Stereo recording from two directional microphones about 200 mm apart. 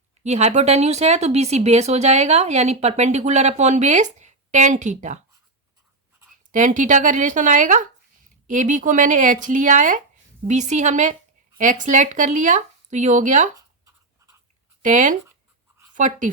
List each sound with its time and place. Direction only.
0.2 s speech: 35° right (ahead or behind)
6.5 s speech: 40° right (ahead or behind)
14.8 s speech: 40° right (ahead or behind)